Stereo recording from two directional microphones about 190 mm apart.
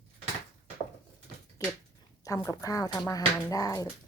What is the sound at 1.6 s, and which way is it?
Dog, 15° left (ahead or behind).